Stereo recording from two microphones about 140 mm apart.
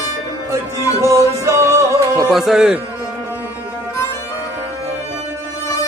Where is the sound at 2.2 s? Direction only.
Centre (ahead or behind).